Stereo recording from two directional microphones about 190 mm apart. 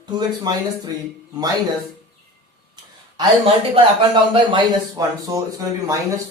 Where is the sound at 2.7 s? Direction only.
25° right (ahead or behind).